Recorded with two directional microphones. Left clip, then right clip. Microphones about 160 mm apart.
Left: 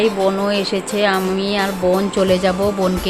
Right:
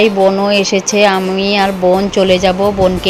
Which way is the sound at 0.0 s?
25° right (ahead or behind).